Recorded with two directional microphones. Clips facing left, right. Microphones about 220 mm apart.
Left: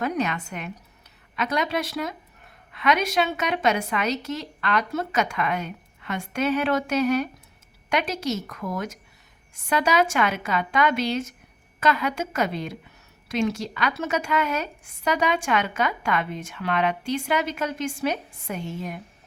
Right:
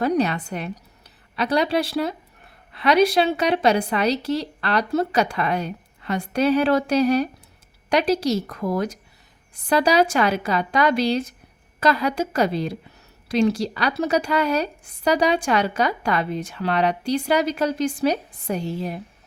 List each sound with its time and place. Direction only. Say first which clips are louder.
0.0 s a woman's voice: right 5 dB; 35° right (ahead or behind)